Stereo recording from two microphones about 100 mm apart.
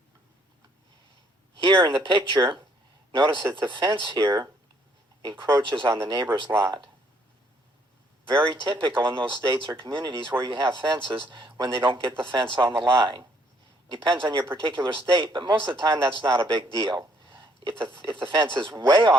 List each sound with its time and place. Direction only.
1.5 s speech: 50° right (ahead or behind)
6.5 s speech: 30° right (ahead or behind)
8.4 s speech: 55° right (ahead or behind)
12.6 s speech: 25° right (ahead or behind)
13.0 s speech: 50° right (ahead or behind)
17.2 s a sound: 55° right (ahead or behind)
18.1 s speech: 50° right (ahead or behind)